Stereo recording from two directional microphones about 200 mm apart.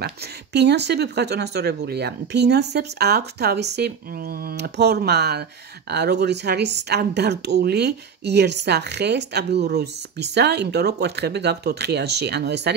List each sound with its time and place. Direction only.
0.0 s speech: 55° right (ahead or behind)